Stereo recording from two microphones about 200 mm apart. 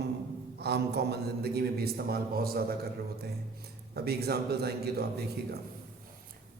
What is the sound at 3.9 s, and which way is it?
A man's voice, 50° right (ahead or behind).